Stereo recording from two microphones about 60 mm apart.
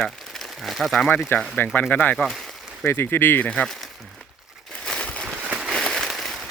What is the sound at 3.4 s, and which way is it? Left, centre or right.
Speech, centre.